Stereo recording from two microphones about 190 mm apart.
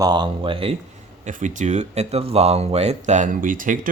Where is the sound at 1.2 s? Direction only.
40° right (ahead or behind).